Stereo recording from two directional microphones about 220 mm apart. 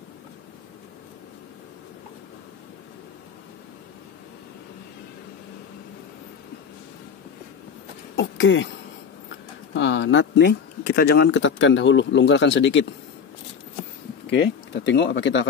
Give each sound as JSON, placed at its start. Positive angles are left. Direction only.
{"t": 8.2, "sound": "throat clearing", "side_deg": 60}
{"t": 9.8, "sound": "speech", "side_deg": 55}
{"t": 14.4, "sound": "speech", "side_deg": 55}